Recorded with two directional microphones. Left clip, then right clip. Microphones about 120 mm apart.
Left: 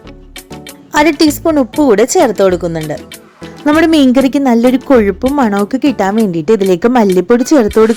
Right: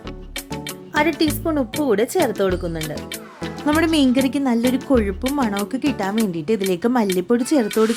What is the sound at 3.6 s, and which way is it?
A woman's voice, 35° left (ahead or behind).